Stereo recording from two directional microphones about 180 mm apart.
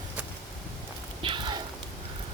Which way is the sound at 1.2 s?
25° right (ahead or behind).